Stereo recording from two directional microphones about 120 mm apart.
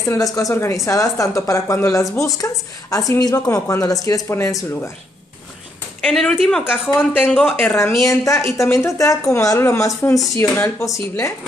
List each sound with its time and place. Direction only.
0.1 s a woman's voice: 30° left (ahead or behind)
6.0 s speech: 5° left (ahead or behind)
7.3 s a woman's voice: 15° left (ahead or behind)